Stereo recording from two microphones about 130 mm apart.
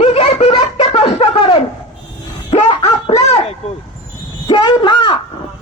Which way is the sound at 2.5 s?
55° left (ahead or behind).